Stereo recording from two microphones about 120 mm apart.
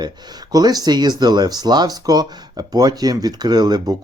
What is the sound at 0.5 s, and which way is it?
Speech, 30° right (ahead or behind).